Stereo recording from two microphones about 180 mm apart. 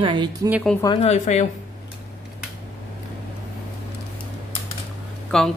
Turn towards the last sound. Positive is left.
turn(degrees=5)  # may be behind; listen again after turning